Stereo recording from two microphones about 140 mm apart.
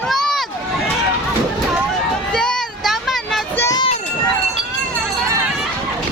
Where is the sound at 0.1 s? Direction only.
Centre (ahead or behind).